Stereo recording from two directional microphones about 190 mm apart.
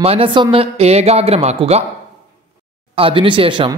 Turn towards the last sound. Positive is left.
turn(degrees=-25)  # may be behind; listen again after turning